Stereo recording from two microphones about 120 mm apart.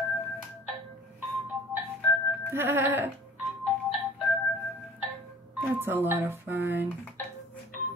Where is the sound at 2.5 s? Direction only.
15° right (ahead or behind).